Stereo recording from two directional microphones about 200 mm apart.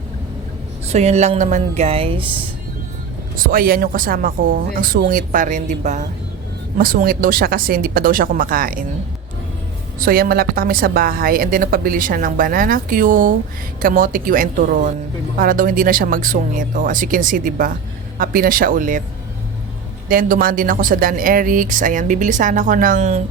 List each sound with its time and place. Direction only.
0.9 s speech: 35° right (ahead or behind)
3.3 s a woman's voice: 45° right (ahead or behind)
10.0 s a woman's voice: 50° right (ahead or behind)
20.1 s a woman's voice: 45° right (ahead or behind)